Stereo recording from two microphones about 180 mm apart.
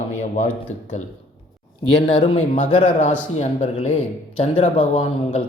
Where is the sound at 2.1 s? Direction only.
30° left (ahead or behind).